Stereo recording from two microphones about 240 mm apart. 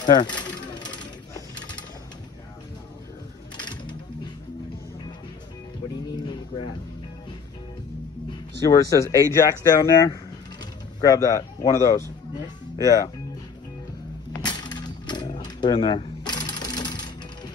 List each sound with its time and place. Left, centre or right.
0.0 s mechanisms: centre
3.5 s mechanisms: centre
6.5 s music: centre
8.3 s speech: centre
14.3 s a sound: centre